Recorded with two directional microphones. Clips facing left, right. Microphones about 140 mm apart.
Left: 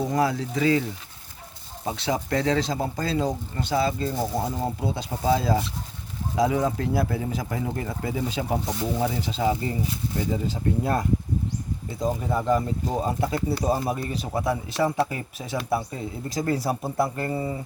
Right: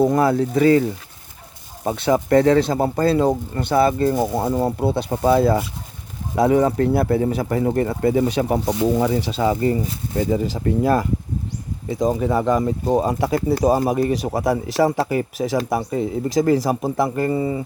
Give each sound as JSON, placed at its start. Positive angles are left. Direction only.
{"t": 0.0, "sound": "speech", "side_deg": -55}
{"t": 10.3, "sound": "speech", "side_deg": -85}